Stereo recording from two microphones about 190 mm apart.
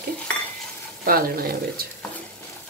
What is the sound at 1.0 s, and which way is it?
Speech, 50° right (ahead or behind).